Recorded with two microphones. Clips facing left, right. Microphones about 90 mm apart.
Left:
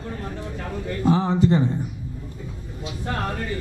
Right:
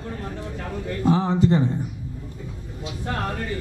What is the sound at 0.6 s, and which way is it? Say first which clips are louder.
Speech: even; 15° left (ahead or behind).